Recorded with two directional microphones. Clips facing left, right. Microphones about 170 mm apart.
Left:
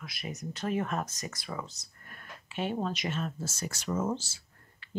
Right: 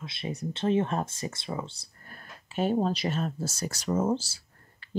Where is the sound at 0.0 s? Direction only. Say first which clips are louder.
Right 5 dB; 25° right (ahead or behind).